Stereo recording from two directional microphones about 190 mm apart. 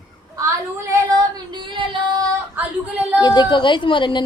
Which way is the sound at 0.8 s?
20° right (ahead or behind).